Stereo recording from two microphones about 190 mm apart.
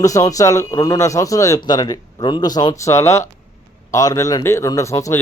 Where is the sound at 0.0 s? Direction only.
15° left (ahead or behind).